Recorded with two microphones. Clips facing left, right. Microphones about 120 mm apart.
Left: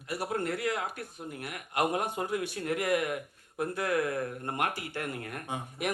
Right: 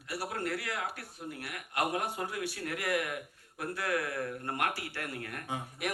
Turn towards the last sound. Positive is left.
turn(degrees=25)  # may be behind; listen again after turning